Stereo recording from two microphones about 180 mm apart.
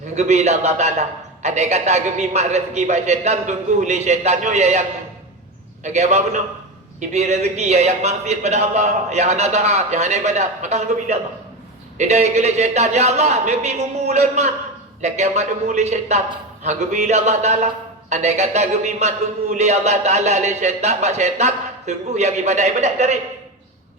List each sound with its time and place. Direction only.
0.2 s a man's voice: 40° right (ahead or behind)